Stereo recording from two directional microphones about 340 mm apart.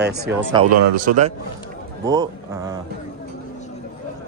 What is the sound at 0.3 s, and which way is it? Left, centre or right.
Speech, centre.